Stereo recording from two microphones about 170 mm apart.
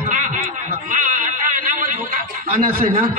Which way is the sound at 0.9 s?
50° right (ahead or behind).